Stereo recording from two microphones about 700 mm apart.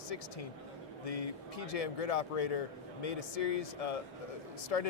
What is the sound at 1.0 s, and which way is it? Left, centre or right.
Speech, left.